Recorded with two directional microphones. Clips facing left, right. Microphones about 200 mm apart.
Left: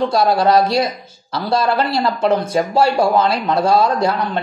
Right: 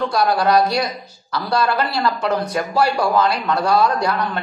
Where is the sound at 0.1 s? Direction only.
25° left (ahead or behind).